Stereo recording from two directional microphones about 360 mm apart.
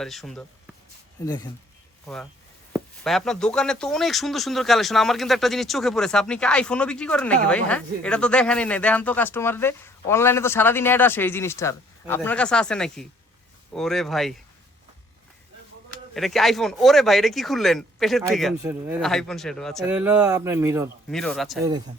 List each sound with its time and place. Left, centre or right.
0.0 s speech: centre
2.7 s speech: centre
16.1 s speech: centre